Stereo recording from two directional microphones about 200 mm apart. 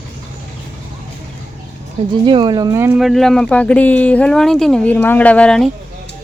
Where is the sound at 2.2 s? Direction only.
25° right (ahead or behind).